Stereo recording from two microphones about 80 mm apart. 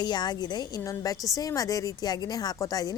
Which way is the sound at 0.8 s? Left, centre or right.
Left.